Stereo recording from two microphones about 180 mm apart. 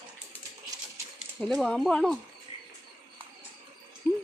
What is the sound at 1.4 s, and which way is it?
Speech, centre (ahead or behind).